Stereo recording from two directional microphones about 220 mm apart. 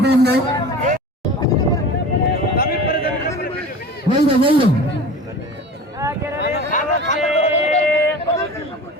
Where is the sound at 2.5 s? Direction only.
45° left (ahead or behind).